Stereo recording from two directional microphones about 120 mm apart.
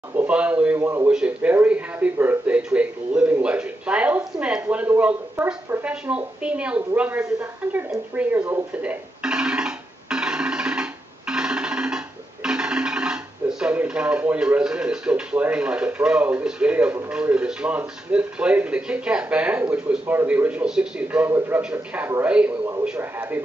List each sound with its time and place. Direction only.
0.1 s speech: 15° right (ahead or behind)
9.2 s music: 5° right (ahead or behind)
12.4 s speech: 5° right (ahead or behind)